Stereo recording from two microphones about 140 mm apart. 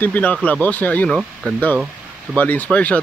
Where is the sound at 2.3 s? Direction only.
10° left (ahead or behind).